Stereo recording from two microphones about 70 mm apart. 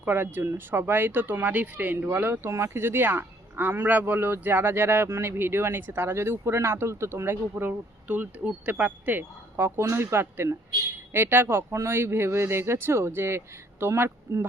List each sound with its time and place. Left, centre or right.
0.0 s speech: right